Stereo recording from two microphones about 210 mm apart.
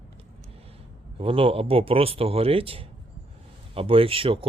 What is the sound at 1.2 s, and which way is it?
Speech, 25° right (ahead or behind).